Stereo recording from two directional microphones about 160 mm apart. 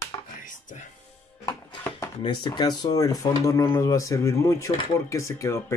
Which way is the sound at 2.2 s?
25° left (ahead or behind).